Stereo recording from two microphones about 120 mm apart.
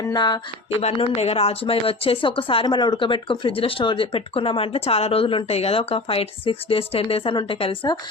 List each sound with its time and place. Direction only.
0.1 s speech: 35° left (ahead or behind)
0.8 s speech: 55° left (ahead or behind)